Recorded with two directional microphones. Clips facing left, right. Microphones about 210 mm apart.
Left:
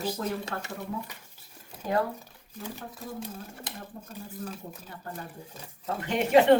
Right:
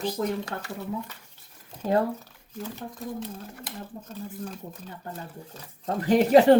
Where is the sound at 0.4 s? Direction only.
20° left (ahead or behind).